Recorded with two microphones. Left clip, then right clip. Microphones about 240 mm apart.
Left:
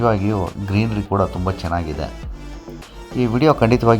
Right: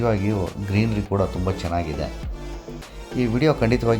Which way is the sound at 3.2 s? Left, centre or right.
Centre.